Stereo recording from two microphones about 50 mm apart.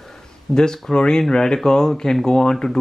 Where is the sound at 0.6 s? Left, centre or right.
Centre.